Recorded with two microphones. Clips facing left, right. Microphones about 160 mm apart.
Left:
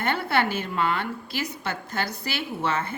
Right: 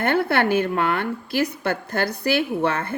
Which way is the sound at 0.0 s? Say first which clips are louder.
Right 5 dB; 55° right (ahead or behind).